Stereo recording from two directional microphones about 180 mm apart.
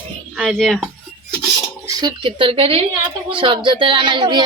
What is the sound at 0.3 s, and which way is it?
Speech, 5° right (ahead or behind).